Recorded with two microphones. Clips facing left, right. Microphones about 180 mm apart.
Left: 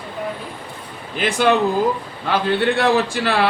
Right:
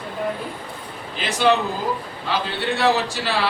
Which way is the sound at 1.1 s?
55° left (ahead or behind).